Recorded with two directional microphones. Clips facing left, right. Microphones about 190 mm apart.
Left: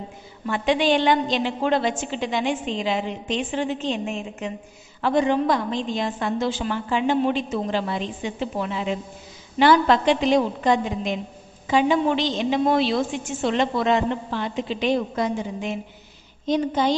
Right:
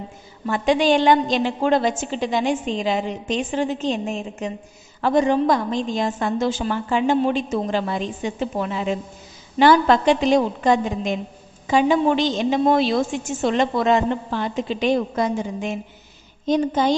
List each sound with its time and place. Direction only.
0.5 s a woman's voice: 40° right (ahead or behind)